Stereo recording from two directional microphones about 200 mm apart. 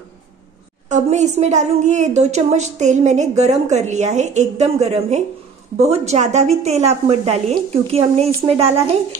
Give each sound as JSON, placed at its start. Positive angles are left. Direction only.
{"t": 0.8, "sound": "a woman's voice", "side_deg": -35}